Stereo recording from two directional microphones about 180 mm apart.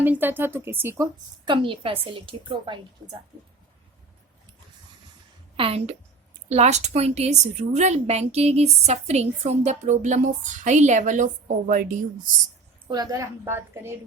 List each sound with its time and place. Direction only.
0.0 s speech: 10° right (ahead or behind)
1.5 s a woman's voice: 30° right (ahead or behind)
5.5 s a woman's voice: 35° right (ahead or behind)
12.9 s speech: 20° right (ahead or behind)